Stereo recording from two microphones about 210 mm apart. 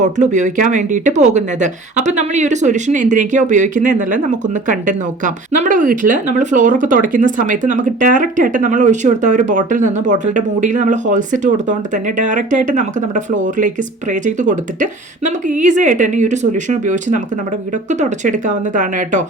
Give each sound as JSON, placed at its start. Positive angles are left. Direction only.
{"t": 0.0, "sound": "speech", "side_deg": -35}